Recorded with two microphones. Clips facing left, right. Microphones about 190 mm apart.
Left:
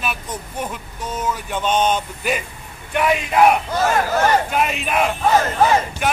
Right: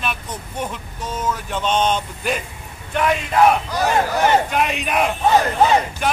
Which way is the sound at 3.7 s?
15° right (ahead or behind).